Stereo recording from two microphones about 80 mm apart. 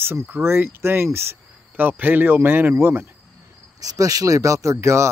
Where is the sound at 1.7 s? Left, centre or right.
Right.